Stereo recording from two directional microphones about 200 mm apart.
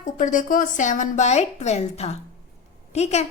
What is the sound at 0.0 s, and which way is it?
A woman's voice, 40° left (ahead or behind).